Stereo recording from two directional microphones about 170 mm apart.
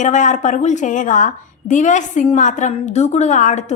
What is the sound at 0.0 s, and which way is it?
A woman's voice, 45° left (ahead or behind).